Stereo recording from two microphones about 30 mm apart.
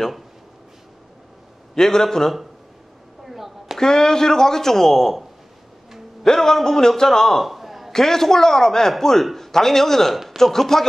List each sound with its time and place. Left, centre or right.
1.8 s a man's voice: centre
3.3 s a sound: centre
3.8 s speech: left
6.2 s speech: centre
7.4 s a sound: centre
7.9 s speech: centre
9.2 s speech: centre